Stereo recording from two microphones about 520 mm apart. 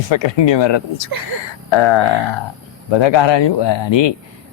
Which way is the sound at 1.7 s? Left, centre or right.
Left.